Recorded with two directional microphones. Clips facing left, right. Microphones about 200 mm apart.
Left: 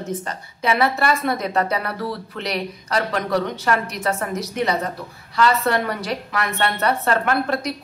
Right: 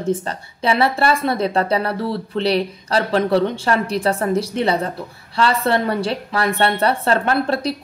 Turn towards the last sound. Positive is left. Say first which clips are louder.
# right 3 dB
turn(degrees=-30)  # may be behind; listen again after turning